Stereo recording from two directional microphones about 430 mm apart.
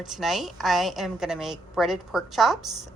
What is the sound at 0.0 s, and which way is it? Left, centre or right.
Speech, centre.